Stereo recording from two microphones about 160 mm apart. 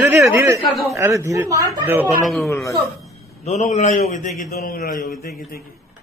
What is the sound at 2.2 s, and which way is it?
Speech, centre (ahead or behind).